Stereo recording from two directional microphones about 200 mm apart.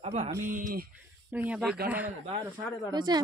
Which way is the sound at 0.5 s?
45° right (ahead or behind).